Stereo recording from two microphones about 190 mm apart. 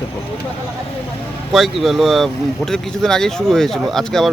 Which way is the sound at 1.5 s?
Centre (ahead or behind).